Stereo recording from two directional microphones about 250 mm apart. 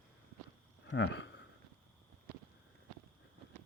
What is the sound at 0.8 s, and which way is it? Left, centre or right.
Speech, left.